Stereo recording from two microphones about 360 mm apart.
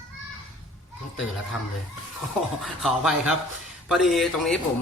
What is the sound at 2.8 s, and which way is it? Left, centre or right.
Speech, centre.